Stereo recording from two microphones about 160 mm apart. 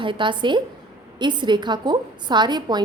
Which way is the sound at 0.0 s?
30° right (ahead or behind).